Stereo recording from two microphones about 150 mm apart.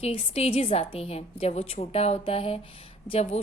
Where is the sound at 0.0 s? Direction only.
45° left (ahead or behind).